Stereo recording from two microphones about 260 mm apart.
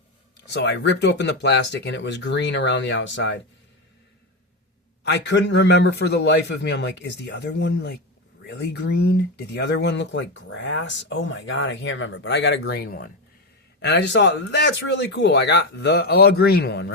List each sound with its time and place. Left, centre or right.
0.5 s speech: left
5.0 s speech: left